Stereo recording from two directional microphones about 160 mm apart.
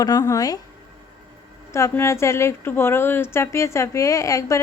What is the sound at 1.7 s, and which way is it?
A woman's voice, 15° left (ahead or behind).